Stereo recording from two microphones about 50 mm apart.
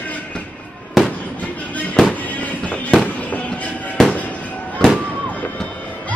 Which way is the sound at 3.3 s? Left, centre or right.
Left.